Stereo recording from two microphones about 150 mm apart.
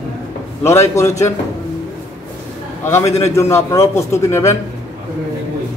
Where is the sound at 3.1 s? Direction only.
45° left (ahead or behind).